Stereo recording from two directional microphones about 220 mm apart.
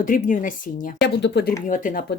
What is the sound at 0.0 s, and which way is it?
Speech, 35° left (ahead or behind).